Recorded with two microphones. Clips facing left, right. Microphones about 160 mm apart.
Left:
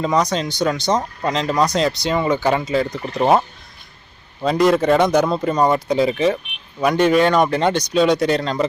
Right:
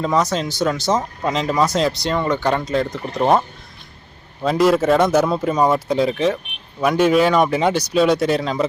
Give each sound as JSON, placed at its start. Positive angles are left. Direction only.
{"t": 0.0, "sound": "speech", "side_deg": -5}
{"t": 4.4, "sound": "speech", "side_deg": 0}